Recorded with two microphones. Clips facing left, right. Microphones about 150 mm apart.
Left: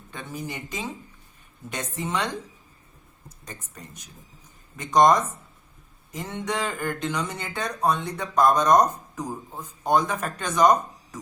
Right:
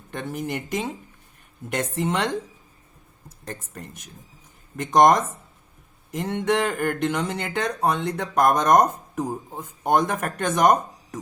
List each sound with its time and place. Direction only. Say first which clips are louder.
0.1 s speech: right 6 dB; 60° right (ahead or behind)
3.4 s speech: right 6 dB; 55° right (ahead or behind)